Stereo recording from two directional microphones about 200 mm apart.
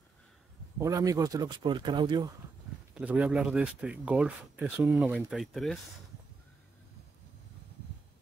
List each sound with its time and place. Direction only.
0.7 s speech: 15° right (ahead or behind)
2.9 s speech: 5° right (ahead or behind)